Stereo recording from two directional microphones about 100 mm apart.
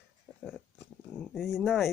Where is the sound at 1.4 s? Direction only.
Centre (ahead or behind).